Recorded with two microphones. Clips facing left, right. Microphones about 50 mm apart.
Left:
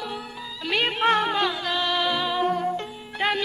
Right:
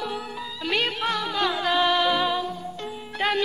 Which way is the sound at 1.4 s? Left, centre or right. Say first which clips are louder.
Right 3 dB; centre.